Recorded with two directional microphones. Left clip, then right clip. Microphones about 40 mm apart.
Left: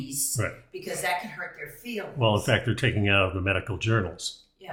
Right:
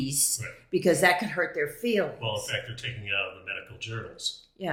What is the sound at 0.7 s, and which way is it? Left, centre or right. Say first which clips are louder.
Speech: right 10 dB; right.